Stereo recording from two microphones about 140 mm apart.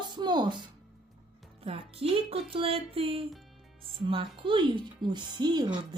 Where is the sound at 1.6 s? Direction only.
45° right (ahead or behind).